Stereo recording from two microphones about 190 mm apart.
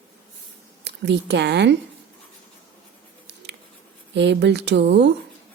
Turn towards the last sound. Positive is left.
turn(degrees=-65)  # may be behind; listen again after turning